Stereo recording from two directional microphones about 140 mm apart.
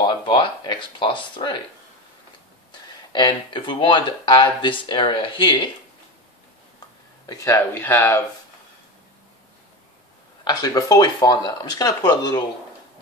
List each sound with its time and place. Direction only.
0.0 s speech: 30° left (ahead or behind)
3.1 s speech: 35° left (ahead or behind)
7.2 s speech: 20° left (ahead or behind)
10.4 s speech: 30° left (ahead or behind)